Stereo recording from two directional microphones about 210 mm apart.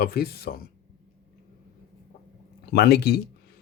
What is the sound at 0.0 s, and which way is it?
Speech, 50° left (ahead or behind).